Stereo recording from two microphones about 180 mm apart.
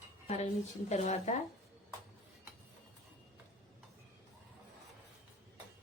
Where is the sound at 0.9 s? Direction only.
40° left (ahead or behind).